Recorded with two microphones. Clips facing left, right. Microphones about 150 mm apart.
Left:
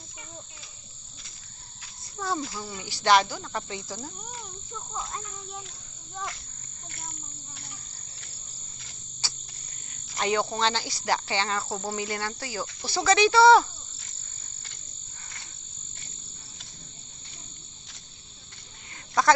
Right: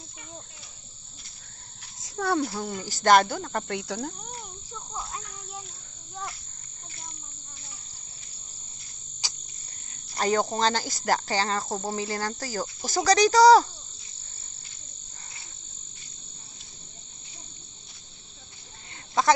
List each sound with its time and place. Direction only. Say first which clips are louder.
2.0 s speech: right 5 dB; 75° right (ahead or behind)
4.9 s a sound: left 1 dB; centre (ahead or behind)
9.2 s cricket: left 1 dB; 15° right (ahead or behind)
10.2 s cricket: right 2 dB; 40° right (ahead or behind)
10.5 s speech: right 2 dB; 40° right (ahead or behind)
19.2 s a sound: even; 25° right (ahead or behind)